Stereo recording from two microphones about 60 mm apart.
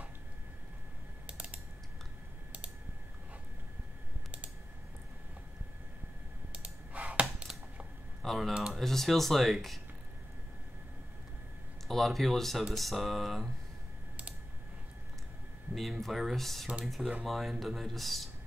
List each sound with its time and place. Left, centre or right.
1.2 s typing: right
6.5 s a sound: right
8.2 s typing: centre
8.7 s speech: centre
11.9 s speech: centre
15.7 s speech: centre